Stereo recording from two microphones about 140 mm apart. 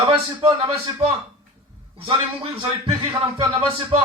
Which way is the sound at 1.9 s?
40° right (ahead or behind).